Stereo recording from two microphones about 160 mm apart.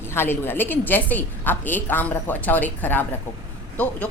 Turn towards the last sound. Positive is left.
turn(degrees=10)  # may be behind; listen again after turning